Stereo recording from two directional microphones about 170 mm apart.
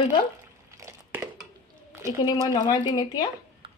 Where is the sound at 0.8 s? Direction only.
20° right (ahead or behind).